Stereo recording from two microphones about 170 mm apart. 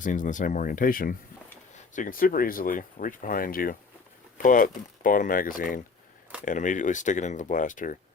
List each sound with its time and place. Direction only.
0.0 s speech: 50° left (ahead or behind)